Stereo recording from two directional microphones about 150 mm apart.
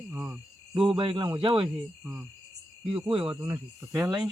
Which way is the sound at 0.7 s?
35° right (ahead or behind).